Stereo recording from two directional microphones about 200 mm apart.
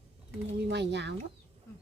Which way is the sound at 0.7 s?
60° right (ahead or behind).